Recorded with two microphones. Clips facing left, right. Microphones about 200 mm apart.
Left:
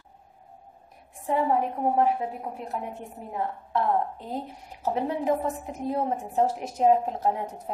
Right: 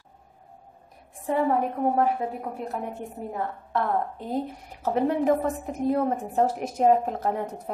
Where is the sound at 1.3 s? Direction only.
50° right (ahead or behind).